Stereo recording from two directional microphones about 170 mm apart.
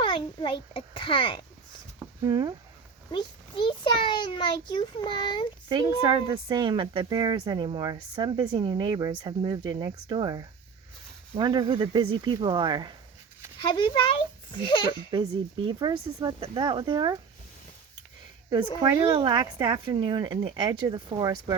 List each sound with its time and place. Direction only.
0.0 s a child's voice: 30° left (ahead or behind)
2.2 s speech: 25° right (ahead or behind)
3.1 s a child's voice: 30° left (ahead or behind)
5.6 s speech: 25° right (ahead or behind)
13.6 s a child's voice: 30° left (ahead or behind)
15.1 s speech: 30° right (ahead or behind)
18.8 s speech: 30° right (ahead or behind)